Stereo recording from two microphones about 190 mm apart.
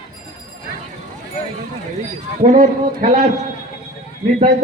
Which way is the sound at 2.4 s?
40° right (ahead or behind).